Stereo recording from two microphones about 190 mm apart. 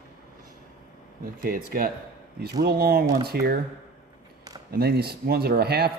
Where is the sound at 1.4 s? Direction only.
50° right (ahead or behind).